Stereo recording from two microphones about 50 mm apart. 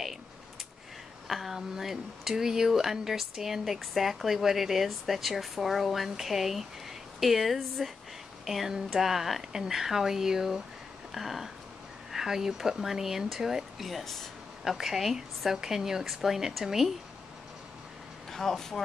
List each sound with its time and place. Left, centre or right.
1.2 s a woman's voice: centre
11.1 s a sound: centre
12.1 s a woman's voice: centre
13.8 s speech: centre
14.6 s a woman's voice: centre
18.3 s speech: centre